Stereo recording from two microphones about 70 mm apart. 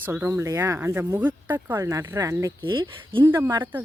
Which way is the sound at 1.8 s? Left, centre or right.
Right.